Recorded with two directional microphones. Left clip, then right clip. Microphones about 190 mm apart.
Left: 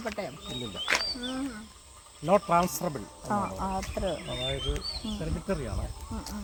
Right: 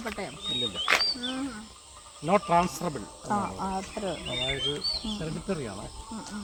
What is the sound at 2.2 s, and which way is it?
Speech, 45° left (ahead or behind).